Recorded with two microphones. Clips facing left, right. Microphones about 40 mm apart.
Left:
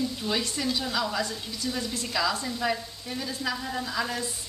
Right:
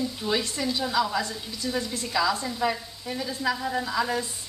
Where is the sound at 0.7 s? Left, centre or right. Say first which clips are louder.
Right 7 dB; centre.